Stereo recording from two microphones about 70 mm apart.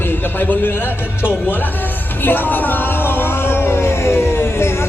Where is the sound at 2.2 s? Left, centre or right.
Left.